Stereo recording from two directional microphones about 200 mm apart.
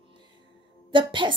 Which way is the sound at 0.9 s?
25° right (ahead or behind).